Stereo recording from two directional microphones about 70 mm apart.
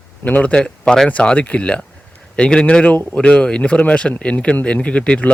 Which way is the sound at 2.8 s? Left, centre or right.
Left.